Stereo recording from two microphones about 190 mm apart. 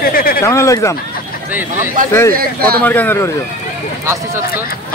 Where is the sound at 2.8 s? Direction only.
10° left (ahead or behind).